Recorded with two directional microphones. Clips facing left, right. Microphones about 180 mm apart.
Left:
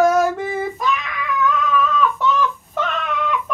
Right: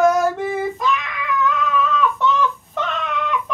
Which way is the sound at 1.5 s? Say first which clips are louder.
Left 1 dB; centre (ahead or behind).